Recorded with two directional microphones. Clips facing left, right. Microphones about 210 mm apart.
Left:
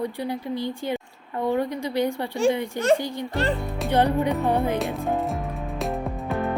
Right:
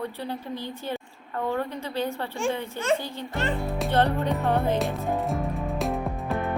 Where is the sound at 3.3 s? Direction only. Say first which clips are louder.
Left 3 dB; 35° left (ahead or behind).